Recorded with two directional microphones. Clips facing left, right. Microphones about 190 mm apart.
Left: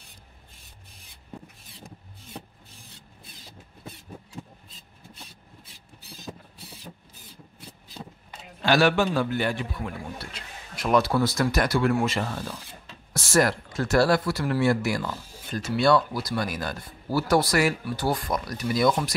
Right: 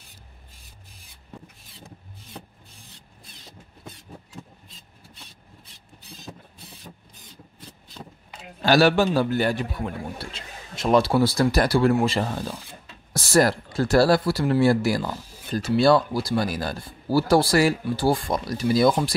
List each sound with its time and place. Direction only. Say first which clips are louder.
8.6 s speech: right 3 dB; 35° right (ahead or behind)